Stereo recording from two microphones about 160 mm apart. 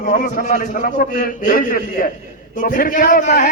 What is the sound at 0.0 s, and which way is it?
A man's voice, 50° left (ahead or behind).